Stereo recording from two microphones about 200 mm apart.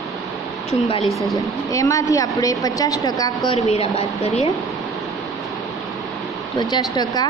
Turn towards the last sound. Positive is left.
turn(degrees=20)  # may be behind; listen again after turning